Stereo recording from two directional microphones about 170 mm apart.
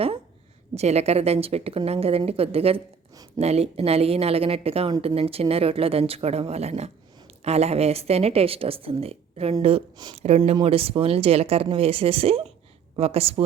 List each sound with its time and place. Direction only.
0.8 s speech: 40° right (ahead or behind)